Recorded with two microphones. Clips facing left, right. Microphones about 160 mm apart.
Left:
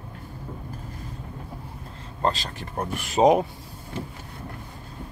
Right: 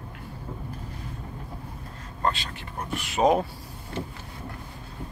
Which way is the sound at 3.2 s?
20° left (ahead or behind).